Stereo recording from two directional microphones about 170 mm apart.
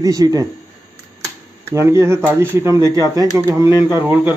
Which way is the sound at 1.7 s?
15° right (ahead or behind).